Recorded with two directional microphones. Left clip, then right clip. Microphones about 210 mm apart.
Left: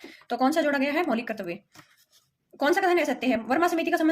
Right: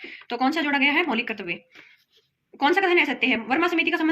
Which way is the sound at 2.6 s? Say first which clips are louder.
Right 3 dB; 50° left (ahead or behind).